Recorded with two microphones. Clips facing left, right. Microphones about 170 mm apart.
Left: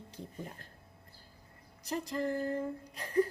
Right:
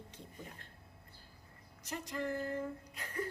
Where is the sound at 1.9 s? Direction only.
35° left (ahead or behind).